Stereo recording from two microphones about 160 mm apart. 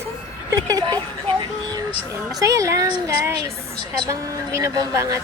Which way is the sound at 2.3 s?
20° right (ahead or behind).